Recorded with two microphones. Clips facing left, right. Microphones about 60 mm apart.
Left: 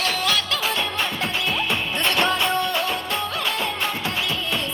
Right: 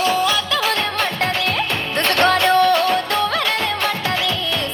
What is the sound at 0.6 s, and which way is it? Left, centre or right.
Music, right.